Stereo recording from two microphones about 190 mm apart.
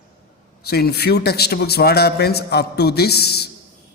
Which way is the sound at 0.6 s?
55° left (ahead or behind).